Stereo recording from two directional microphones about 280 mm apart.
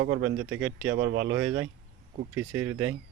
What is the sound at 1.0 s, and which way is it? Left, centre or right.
Speech, right.